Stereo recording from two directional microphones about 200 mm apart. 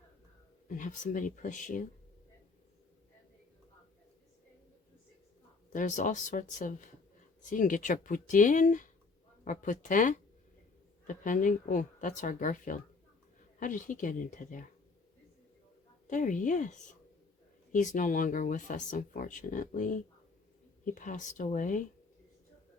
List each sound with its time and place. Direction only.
0.7 s speech: 40° left (ahead or behind)
5.7 s speech: 40° left (ahead or behind)
16.0 s speech: 40° left (ahead or behind)